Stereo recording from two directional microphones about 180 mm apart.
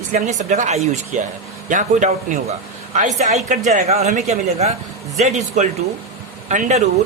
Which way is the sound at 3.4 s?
45° right (ahead or behind).